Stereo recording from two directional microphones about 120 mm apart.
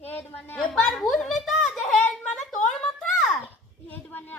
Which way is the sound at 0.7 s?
5° left (ahead or behind).